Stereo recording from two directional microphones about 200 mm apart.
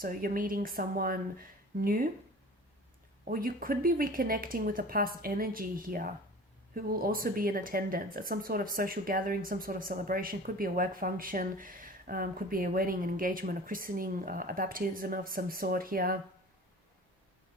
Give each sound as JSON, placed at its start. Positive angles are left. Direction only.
{"t": 0.0, "sound": "speech", "side_deg": -45}
{"t": 3.2, "sound": "speech", "side_deg": -45}